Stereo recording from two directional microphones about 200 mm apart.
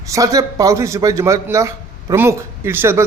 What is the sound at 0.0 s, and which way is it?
A man's voice, 15° right (ahead or behind).